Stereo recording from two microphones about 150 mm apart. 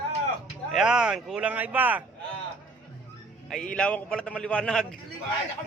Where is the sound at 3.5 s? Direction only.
5° left (ahead or behind).